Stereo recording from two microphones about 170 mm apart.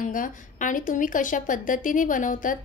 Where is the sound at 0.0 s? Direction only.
50° left (ahead or behind).